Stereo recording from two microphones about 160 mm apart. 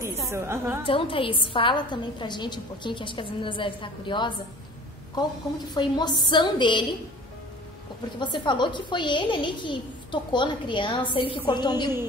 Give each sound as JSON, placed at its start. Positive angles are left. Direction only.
{"t": 0.3, "sound": "a woman's voice", "side_deg": -15}
{"t": 0.8, "sound": "a woman's voice", "side_deg": 35}
{"t": 5.8, "sound": "a child's voice", "side_deg": 25}
{"t": 8.2, "sound": "a child's voice", "side_deg": 30}